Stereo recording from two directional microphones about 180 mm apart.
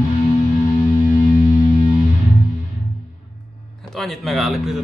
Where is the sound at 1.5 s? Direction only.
25° left (ahead or behind).